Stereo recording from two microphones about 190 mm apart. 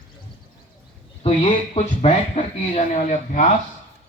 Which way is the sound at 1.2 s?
35° left (ahead or behind).